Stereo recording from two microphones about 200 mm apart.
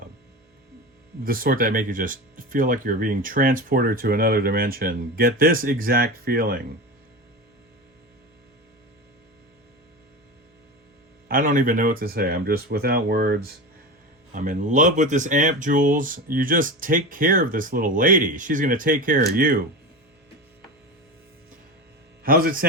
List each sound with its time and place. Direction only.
1.2 s speech: 45° right (ahead or behind)
11.3 s speech: 45° right (ahead or behind)
14.3 s speech: 40° right (ahead or behind)
22.2 s a man's voice: 45° right (ahead or behind)